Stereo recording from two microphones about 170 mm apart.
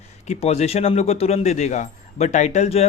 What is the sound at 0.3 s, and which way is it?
Speech, 40° left (ahead or behind).